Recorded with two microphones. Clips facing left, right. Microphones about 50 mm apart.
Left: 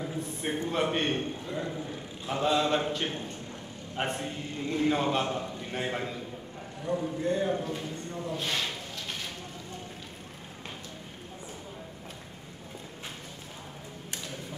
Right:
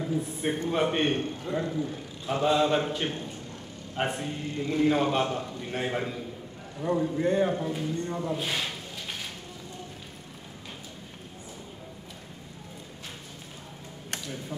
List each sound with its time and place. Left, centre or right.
0.0 s a sound: centre
0.7 s a man's voice: centre
1.4 s a man's voice: right
1.7 s a man's voice: centre
6.8 s a man's voice: right
7.5 s a man's voice: centre
8.1 s a man's voice: right
8.4 s a sound: centre